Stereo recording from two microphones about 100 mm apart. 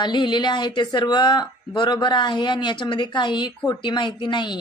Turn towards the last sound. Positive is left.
turn(degrees=50)  # may be behind; listen again after turning